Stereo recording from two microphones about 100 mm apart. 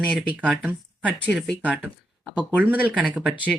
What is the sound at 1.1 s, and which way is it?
Speech, 15° left (ahead or behind).